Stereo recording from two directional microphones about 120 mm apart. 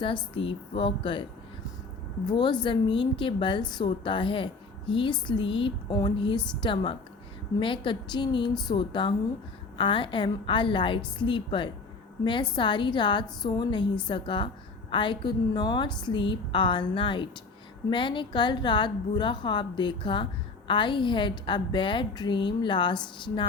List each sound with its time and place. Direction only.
0.3 s a woman's voice: 45° left (ahead or behind)